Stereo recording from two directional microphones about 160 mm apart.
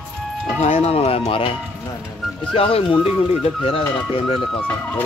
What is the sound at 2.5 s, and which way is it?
Speech, 35° left (ahead or behind).